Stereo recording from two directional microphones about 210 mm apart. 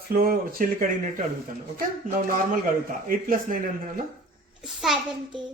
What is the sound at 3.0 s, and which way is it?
Speech, 40° right (ahead or behind).